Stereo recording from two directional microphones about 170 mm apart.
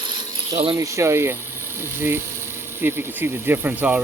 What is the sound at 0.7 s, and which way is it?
Speech, 20° right (ahead or behind).